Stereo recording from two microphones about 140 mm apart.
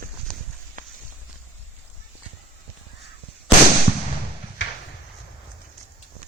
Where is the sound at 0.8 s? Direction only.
75° right (ahead or behind).